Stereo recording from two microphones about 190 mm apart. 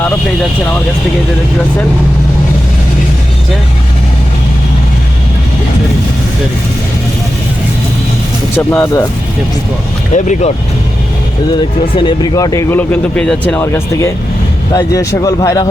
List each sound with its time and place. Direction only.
8.5 s speech: 10° left (ahead or behind)
10.1 s speech: 35° left (ahead or behind)
11.9 s speech: 25° left (ahead or behind)